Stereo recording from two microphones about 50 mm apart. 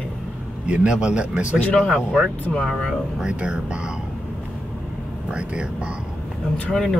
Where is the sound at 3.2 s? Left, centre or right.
Centre.